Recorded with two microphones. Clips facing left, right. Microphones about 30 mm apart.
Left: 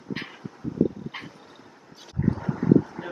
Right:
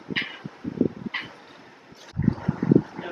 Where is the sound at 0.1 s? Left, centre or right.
Right.